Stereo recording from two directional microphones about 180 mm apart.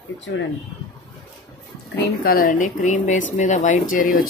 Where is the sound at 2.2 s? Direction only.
50° left (ahead or behind).